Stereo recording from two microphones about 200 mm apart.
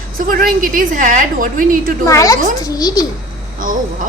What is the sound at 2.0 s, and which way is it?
A child's voice, 15° left (ahead or behind).